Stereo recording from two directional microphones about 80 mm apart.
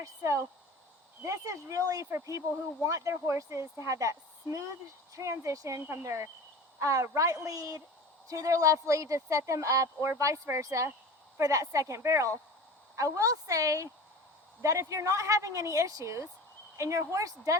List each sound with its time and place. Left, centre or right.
0.0 s speech: right